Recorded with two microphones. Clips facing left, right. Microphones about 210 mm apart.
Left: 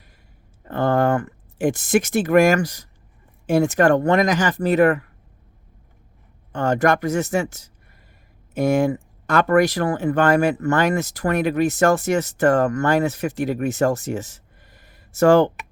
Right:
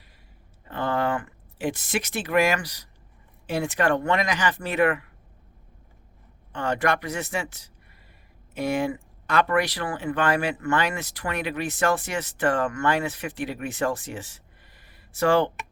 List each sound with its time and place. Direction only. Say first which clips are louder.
0.6 s a sound: left 7 dB; 45° left (ahead or behind)
3.4 s speech: left 8 dB; 45° left (ahead or behind)
6.5 s speech: left 6 dB; 45° left (ahead or behind)